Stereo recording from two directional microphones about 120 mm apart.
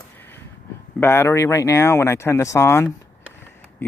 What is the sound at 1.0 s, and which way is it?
Speech, 20° left (ahead or behind).